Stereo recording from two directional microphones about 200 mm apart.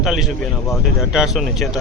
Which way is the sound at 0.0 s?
Centre (ahead or behind).